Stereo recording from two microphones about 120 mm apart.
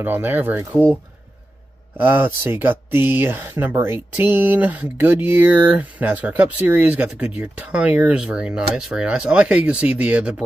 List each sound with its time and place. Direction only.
0.0 s speech: 15° right (ahead or behind)
2.0 s speech: 15° right (ahead or behind)